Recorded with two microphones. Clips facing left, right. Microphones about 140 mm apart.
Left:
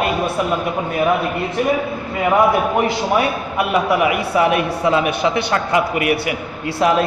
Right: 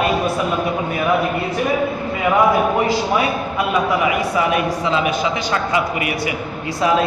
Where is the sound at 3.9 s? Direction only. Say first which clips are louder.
Left 2 dB; 60° left (ahead or behind).